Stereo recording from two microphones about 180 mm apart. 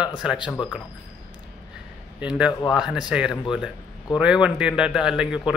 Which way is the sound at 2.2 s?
5° right (ahead or behind).